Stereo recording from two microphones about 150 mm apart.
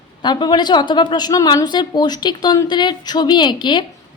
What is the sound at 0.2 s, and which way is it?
A woman's voice, 30° left (ahead or behind).